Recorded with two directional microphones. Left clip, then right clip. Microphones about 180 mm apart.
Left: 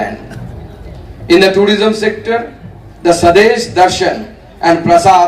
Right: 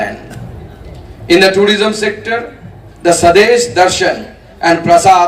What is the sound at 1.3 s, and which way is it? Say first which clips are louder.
A man's voice: even; 15° right (ahead or behind).